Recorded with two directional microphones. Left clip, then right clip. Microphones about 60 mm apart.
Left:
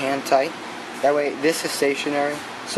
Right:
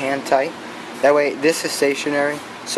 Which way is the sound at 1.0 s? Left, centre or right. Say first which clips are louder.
Right 5 dB; right.